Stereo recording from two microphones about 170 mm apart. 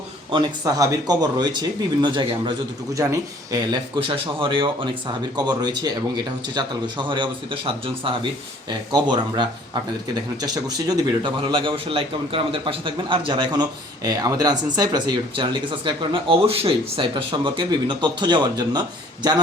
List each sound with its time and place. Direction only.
0.3 s a man's voice: 25° right (ahead or behind)
4.1 s a man's voice: 30° right (ahead or behind)